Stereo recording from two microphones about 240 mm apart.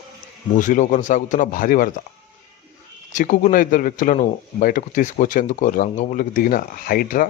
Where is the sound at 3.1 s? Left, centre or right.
Left.